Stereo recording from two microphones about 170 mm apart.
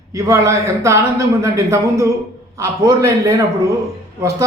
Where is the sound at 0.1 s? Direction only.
15° right (ahead or behind).